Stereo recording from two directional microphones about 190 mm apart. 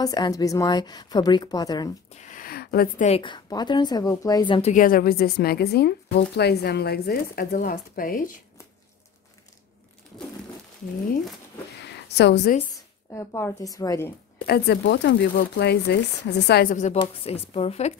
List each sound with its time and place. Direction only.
0.0 s a woman's voice: 20° left (ahead or behind)
2.0 s a sound: 40° left (ahead or behind)
3.1 s a woman's voice: 25° left (ahead or behind)
4.6 s a woman's voice: 40° left (ahead or behind)
11.9 s a woman's voice: 60° left (ahead or behind)
12.7 s speech: 15° left (ahead or behind)
14.4 s speech: 60° left (ahead or behind)
16.7 s speech: 35° left (ahead or behind)